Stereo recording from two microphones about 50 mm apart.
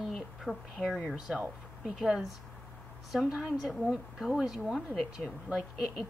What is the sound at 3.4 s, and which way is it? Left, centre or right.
Speech, centre.